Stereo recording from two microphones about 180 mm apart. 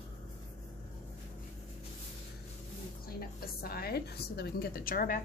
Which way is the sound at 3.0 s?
60° left (ahead or behind).